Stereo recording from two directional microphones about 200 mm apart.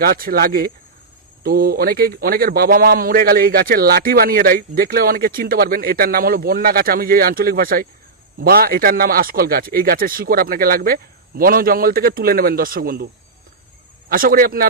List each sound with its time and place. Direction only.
0.0 s a man's voice: 50° right (ahead or behind)
14.1 s a man's voice: 45° right (ahead or behind)